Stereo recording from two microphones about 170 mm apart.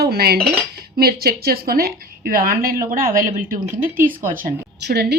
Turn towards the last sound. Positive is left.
turn(degrees=-75)  # may be behind; listen again after turning